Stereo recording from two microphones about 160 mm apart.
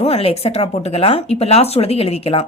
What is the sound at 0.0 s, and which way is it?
Speech, 40° left (ahead or behind).